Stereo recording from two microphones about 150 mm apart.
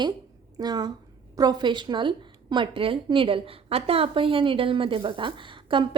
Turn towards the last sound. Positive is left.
turn(degrees=-35)  # may be behind; listen again after turning